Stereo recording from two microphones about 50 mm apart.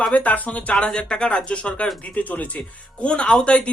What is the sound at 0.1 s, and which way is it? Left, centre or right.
Speech, left.